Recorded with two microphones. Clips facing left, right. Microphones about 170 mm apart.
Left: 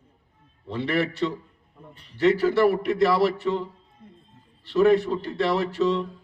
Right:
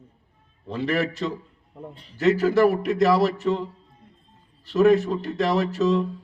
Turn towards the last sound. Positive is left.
turn(degrees=-40)  # may be behind; listen again after turning